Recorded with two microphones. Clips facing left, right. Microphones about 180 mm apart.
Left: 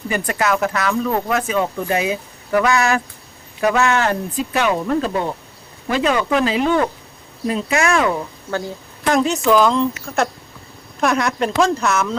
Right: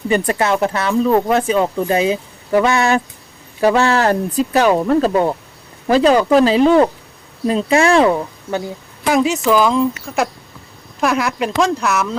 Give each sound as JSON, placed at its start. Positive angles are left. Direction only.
{"t": 0.1, "sound": "speech", "side_deg": -30}
{"t": 9.0, "sound": "speech", "side_deg": -5}